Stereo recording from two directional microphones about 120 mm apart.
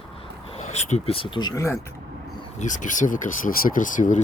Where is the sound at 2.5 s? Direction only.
90° left.